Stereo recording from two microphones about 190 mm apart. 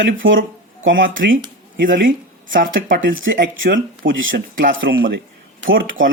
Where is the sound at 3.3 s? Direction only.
80° right.